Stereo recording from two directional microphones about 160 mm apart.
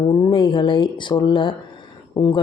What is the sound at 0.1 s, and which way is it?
Speech, 30° left (ahead or behind).